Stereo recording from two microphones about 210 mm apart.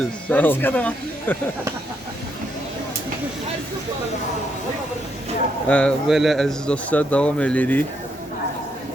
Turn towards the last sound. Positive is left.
turn(degrees=10)  # may be behind; listen again after turning